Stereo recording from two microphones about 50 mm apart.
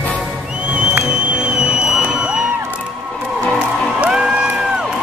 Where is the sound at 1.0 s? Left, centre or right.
Right.